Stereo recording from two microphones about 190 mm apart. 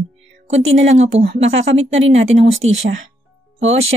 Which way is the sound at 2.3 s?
85° right.